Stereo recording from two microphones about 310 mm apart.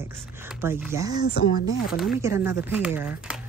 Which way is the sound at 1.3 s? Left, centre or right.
Left.